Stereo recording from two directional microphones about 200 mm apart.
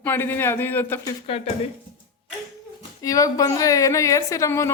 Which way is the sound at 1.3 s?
30° left (ahead or behind).